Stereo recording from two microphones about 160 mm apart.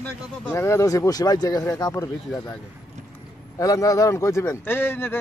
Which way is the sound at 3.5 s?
20° left (ahead or behind).